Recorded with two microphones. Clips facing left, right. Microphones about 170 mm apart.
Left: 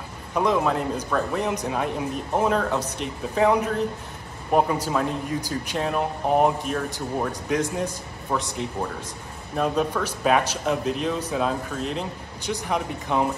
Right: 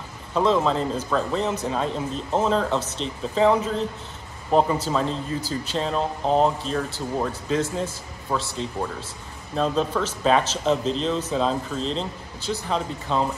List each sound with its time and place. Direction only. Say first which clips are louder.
0.3 s speech: right 1 dB; 15° left (ahead or behind)